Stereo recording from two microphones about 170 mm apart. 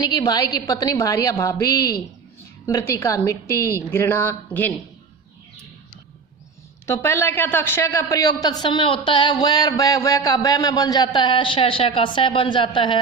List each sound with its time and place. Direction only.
0.0 s a man's voice: 25° left (ahead or behind)
6.8 s a man's voice: 15° left (ahead or behind)